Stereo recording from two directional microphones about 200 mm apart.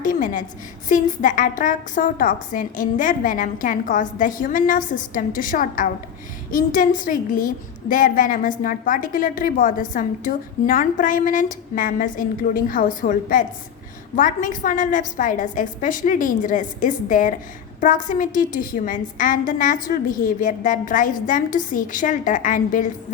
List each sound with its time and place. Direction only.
0.0 s a woman's voice: 40° left (ahead or behind)